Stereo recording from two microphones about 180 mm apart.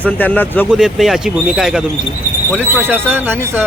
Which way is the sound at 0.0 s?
10° left (ahead or behind).